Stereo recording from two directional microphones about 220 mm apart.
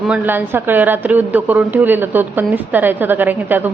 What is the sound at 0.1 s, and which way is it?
A woman's voice, 10° right (ahead or behind).